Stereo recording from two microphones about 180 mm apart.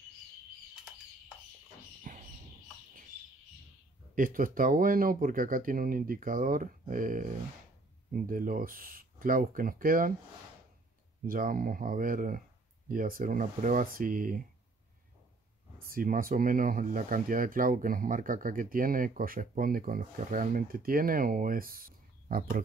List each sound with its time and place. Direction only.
2.1 s a sound: 50° right (ahead or behind)
4.1 s speech: 50° right (ahead or behind)
11.2 s speech: 50° right (ahead or behind)
15.9 s speech: 50° right (ahead or behind)